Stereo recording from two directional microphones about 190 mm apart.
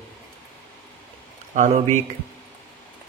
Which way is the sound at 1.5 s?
40° right (ahead or behind).